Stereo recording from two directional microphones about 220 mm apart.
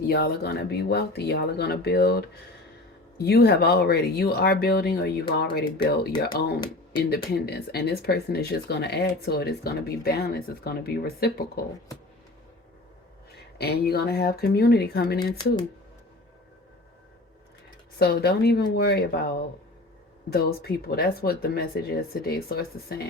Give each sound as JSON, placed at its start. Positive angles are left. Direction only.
{"t": 0.1, "sound": "speech", "side_deg": 45}
{"t": 3.2, "sound": "speech", "side_deg": 45}
{"t": 7.1, "sound": "speech", "side_deg": 45}
{"t": 13.6, "sound": "speech", "side_deg": 45}
{"t": 18.0, "sound": "speech", "side_deg": 45}